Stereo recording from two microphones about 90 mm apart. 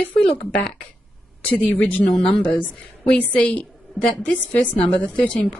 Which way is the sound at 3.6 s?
Centre (ahead or behind).